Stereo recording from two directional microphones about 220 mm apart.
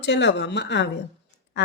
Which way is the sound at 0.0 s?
50° left (ahead or behind).